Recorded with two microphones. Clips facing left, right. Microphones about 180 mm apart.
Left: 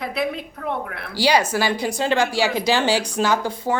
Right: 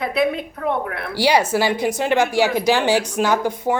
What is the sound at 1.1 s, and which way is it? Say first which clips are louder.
Speech: right 2 dB; 25° right (ahead or behind).